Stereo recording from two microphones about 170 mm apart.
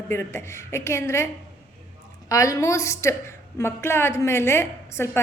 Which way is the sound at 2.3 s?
20° left (ahead or behind).